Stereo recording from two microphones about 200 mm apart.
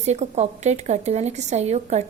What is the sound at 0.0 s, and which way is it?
A woman's voice, 35° right (ahead or behind).